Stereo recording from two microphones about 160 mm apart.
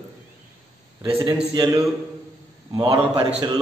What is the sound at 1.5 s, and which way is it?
A man's voice, 25° right (ahead or behind).